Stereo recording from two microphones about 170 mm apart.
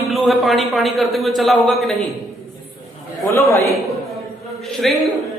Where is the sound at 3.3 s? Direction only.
15° left (ahead or behind).